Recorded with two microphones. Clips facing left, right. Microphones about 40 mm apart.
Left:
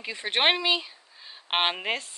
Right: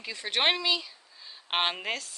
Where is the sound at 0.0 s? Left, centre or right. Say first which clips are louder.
Left 3 dB; left.